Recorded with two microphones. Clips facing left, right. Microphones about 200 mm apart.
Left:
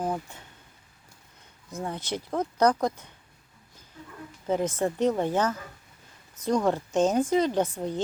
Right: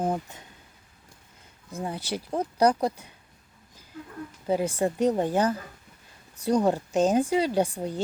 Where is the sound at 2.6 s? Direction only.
10° right (ahead or behind).